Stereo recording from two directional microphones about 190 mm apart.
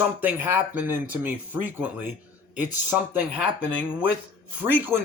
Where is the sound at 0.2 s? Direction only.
10° right (ahead or behind).